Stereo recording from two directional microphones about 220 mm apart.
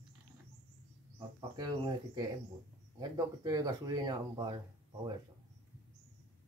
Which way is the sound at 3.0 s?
15° right (ahead or behind).